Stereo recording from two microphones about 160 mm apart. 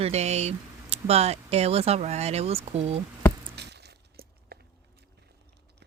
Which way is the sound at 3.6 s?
90° right.